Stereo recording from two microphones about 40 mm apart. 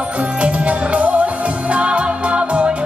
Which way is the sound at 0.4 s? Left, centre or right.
Right.